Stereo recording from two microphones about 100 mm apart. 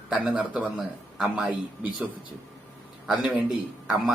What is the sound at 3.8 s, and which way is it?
Speech, 10° right (ahead or behind).